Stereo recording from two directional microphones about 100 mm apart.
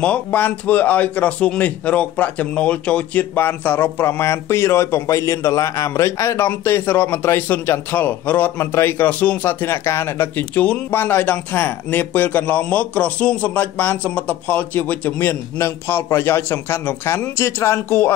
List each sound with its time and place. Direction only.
0.0 s a man's voice: 15° left (ahead or behind)